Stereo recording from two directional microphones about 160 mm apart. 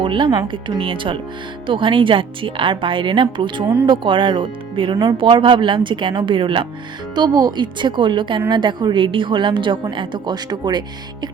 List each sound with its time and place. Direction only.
0.0 s a woman's voice: 30° right (ahead or behind)